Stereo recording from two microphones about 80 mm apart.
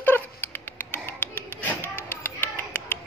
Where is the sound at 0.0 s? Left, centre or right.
Left.